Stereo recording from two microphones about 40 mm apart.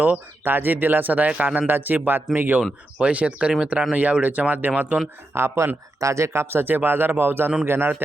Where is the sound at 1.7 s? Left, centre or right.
Right.